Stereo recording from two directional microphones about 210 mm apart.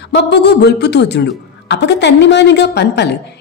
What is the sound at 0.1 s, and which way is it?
A woman's voice, 55° left (ahead or behind).